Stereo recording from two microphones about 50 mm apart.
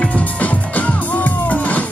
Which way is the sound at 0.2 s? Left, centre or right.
Left.